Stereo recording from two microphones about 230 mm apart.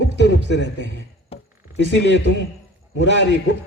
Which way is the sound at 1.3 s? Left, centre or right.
Left.